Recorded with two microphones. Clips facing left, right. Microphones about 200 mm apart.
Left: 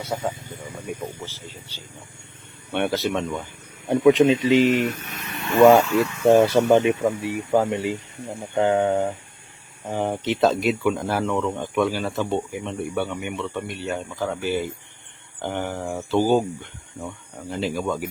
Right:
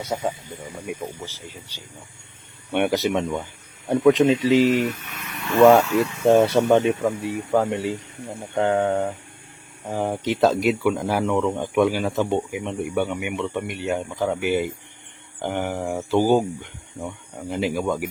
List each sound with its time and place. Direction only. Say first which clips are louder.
0.0 s speech: right 1 dB; 15° right (ahead or behind)
3.8 s speech: left 1 dB; centre (ahead or behind)